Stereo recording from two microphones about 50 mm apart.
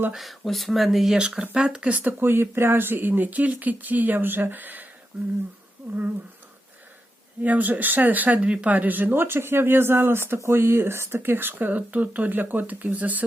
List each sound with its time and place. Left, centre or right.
0.1 s speech: centre
1.1 s speech: centre
2.0 s speech: right
2.2 s speech: right
5.1 s speech: centre
7.4 s speech: right